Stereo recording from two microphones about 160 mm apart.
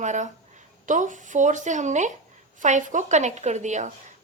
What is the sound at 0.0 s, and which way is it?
A woman's voice, 50° right (ahead or behind).